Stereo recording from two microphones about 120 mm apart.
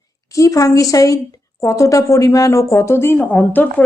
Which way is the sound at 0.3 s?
25° left (ahead or behind).